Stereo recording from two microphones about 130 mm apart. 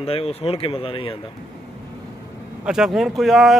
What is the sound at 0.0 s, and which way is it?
Speech, 50° left (ahead or behind).